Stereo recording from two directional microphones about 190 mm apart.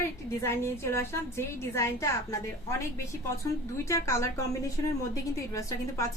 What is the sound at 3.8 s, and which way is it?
Speech, 15° left (ahead or behind).